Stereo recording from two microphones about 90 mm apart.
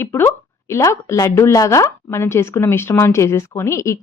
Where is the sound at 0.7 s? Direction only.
35° left (ahead or behind).